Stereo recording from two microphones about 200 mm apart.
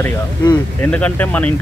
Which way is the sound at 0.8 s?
5° left (ahead or behind).